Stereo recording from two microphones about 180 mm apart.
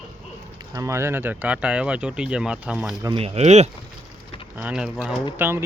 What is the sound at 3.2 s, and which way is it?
Speech, 35° right (ahead or behind).